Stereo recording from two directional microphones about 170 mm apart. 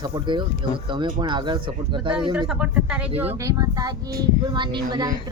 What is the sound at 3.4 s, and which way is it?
Speech, 20° right (ahead or behind).